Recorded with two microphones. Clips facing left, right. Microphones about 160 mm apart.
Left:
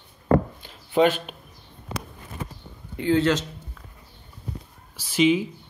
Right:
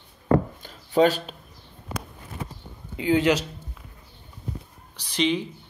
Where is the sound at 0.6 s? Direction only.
40° right (ahead or behind).